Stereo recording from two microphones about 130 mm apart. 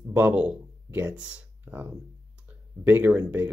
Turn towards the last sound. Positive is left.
turn(degrees=-15)  # may be behind; listen again after turning